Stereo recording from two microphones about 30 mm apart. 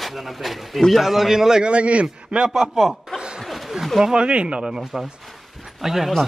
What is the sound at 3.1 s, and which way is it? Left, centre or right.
Snicker, right.